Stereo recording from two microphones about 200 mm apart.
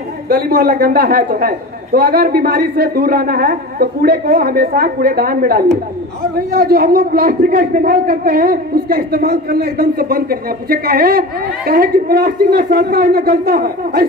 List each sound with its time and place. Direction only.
0.3 s a man's voice: 50° right (ahead or behind)